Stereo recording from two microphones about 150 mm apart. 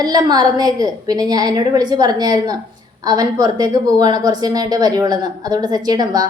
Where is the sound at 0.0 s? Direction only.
25° right (ahead or behind).